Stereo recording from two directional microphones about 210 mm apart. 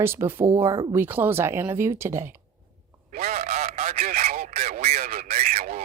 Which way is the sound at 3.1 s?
45° right (ahead or behind).